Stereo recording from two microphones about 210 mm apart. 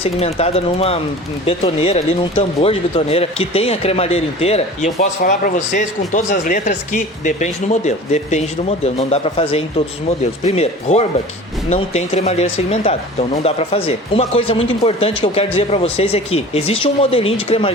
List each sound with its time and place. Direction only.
0.0 s speech: 30° left (ahead or behind)
4.9 s speech: 40° left (ahead or behind); by 17.7 s 25° left (ahead or behind)